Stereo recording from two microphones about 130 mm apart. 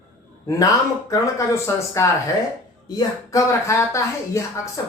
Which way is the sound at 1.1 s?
25° left (ahead or behind).